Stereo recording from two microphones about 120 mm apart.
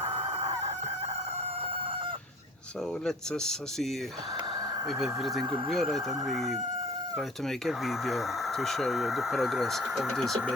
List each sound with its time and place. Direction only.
0.0 s chicken: 60° right (ahead or behind)
3.1 s speech: 5° left (ahead or behind)
4.9 s speech: 5° right (ahead or behind)